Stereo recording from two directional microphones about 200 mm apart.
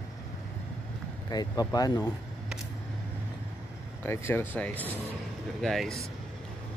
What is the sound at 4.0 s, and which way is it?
A man's voice, 10° left (ahead or behind).